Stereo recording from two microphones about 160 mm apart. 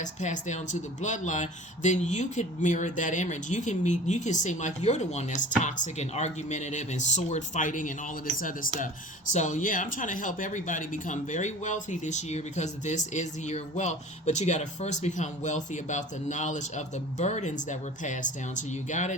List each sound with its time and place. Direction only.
0.0 s speech: 50° left (ahead or behind)